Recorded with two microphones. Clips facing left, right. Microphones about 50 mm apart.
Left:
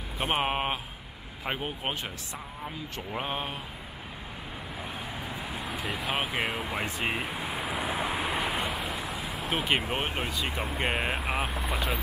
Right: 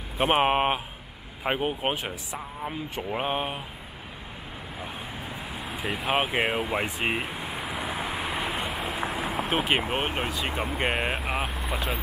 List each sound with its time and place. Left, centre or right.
0.3 s speech: right
5.2 s vehicle: centre
6.7 s speech: centre
7.2 s vehicle: centre
9.2 s vehicle: right
9.5 s speech: centre
9.8 s speech: right
10.2 s speech: centre